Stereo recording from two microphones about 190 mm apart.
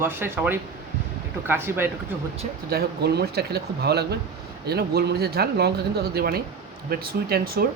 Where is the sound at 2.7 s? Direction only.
55° right (ahead or behind).